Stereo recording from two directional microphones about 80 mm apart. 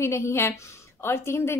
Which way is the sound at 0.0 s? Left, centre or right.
Left.